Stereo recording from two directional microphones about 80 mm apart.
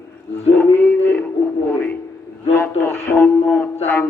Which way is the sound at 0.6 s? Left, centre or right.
Left.